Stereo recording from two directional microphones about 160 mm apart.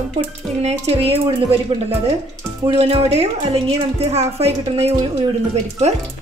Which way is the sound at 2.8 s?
40° right (ahead or behind).